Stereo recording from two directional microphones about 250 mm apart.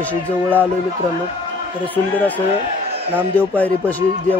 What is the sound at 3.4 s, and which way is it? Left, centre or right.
Speech, centre.